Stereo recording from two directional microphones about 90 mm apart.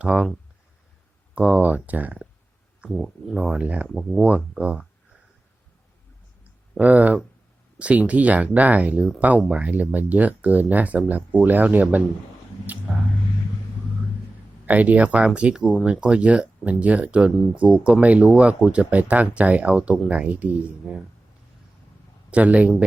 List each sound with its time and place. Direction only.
0.0 s speech: 15° right (ahead or behind)
1.4 s speech: 15° right (ahead or behind)
2.9 s speech: 5° left (ahead or behind)
3.4 s speech: 15° right (ahead or behind)
3.8 s speech: centre (ahead or behind)
4.5 s speech: 15° right (ahead or behind)
6.4 s a sound: 15° right (ahead or behind)
7.8 s speech: 15° right (ahead or behind)
12.9 s a sound: centre (ahead or behind)
14.7 s speech: 15° right (ahead or behind)
22.3 s speech: 15° right (ahead or behind)